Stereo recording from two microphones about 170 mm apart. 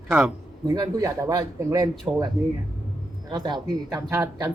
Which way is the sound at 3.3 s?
25° right (ahead or behind).